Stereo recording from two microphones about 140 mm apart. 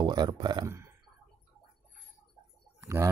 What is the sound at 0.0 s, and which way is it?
Speech, 30° right (ahead or behind).